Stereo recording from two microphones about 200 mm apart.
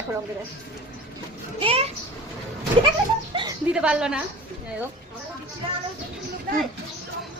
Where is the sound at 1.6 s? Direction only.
25° right (ahead or behind).